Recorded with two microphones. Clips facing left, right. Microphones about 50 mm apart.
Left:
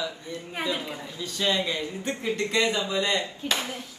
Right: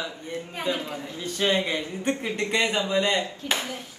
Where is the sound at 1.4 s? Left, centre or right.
Right.